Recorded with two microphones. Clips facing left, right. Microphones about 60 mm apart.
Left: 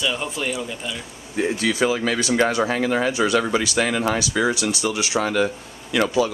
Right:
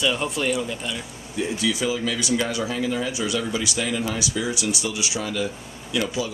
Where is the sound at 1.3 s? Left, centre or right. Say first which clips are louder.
Left 3 dB; left.